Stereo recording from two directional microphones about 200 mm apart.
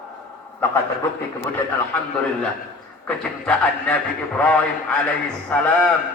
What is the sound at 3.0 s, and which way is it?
Speech, 5° left (ahead or behind).